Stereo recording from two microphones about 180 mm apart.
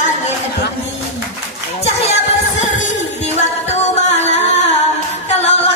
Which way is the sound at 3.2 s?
40° left (ahead or behind).